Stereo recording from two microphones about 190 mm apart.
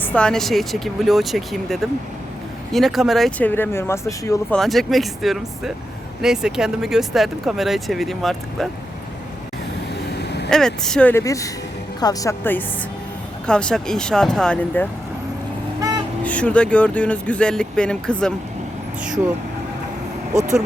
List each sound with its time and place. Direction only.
0.0 s speech: 5° left (ahead or behind)
4.5 s speech: centre (ahead or behind)
10.5 s speech: 5° left (ahead or behind)
16.2 s speech: 5° left (ahead or behind)